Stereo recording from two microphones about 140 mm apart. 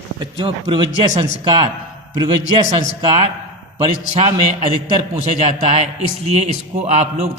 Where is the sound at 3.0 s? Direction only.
45° right (ahead or behind).